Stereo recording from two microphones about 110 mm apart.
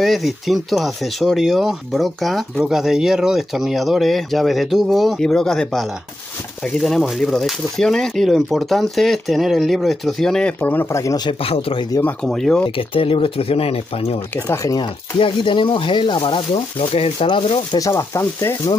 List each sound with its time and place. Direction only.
0.0 s speech: centre (ahead or behind)
10.6 s speech: 20° left (ahead or behind)
11.4 s speech: 60° left (ahead or behind)
12.0 s speech: 5° left (ahead or behind)
12.6 s speech: 55° left (ahead or behind)
14.3 s speech: 25° left (ahead or behind)
14.8 s speech: 50° left (ahead or behind)
17.7 s speech: 30° left (ahead or behind)